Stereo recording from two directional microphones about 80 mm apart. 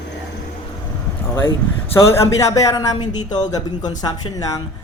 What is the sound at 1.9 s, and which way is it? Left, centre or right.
Speech, left.